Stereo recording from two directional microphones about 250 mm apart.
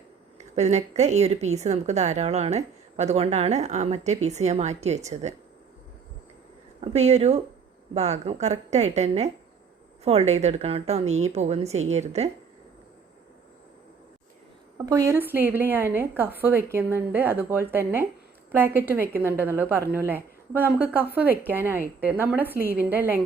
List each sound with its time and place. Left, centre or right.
0.3 s a woman's voice: right
6.8 s a woman's voice: right
14.8 s a woman's voice: centre